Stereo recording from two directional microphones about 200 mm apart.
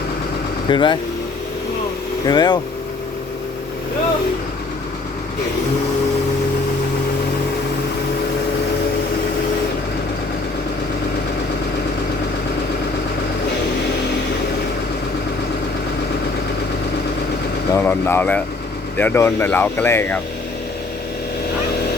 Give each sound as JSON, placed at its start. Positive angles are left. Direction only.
{"t": 0.7, "sound": "speech", "side_deg": 25}
{"t": 2.2, "sound": "speech", "side_deg": 20}
{"t": 17.7, "sound": "speech", "side_deg": 10}